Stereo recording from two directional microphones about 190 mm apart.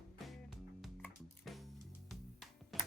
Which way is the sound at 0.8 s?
Centre (ahead or behind).